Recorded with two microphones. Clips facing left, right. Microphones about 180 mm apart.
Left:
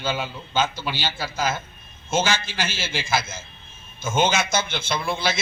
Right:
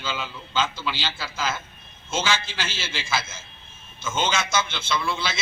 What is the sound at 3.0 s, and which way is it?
A man's voice, 45° left (ahead or behind).